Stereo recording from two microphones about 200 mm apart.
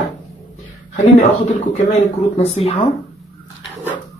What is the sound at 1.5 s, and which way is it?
Speech, 30° left (ahead or behind).